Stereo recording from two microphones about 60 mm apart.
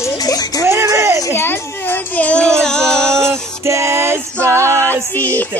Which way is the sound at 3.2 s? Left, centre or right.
Right.